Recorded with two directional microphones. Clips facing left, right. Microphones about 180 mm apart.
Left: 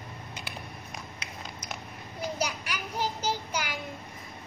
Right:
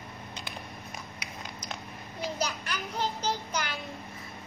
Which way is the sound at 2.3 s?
10° left (ahead or behind).